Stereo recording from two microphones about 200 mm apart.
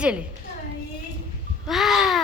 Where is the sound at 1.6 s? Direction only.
Centre (ahead or behind).